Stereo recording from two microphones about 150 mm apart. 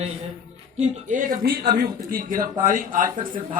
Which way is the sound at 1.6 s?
80° right.